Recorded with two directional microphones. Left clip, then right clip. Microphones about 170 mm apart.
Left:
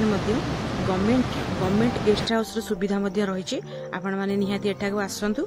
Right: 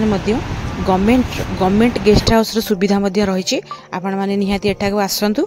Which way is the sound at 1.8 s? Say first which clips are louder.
Right 9 dB; 45° right (ahead or behind).